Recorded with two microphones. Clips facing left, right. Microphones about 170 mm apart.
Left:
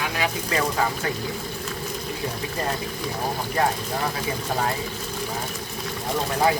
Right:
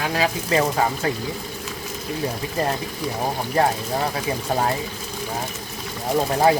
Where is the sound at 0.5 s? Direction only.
30° right (ahead or behind).